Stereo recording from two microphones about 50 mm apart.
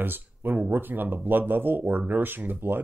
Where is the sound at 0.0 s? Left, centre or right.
Right.